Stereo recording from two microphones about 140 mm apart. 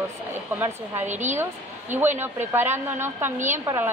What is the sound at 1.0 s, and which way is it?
Speech, 55° right (ahead or behind).